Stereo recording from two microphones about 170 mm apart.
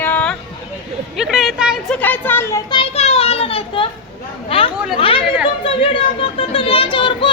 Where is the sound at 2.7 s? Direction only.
30° left (ahead or behind).